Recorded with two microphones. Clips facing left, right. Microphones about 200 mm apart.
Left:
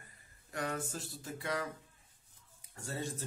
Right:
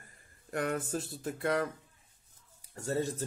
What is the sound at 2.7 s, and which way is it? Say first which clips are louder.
Speech: right 8 dB; 45° right (ahead or behind).